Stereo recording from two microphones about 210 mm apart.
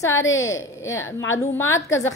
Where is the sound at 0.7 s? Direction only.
15° left (ahead or behind).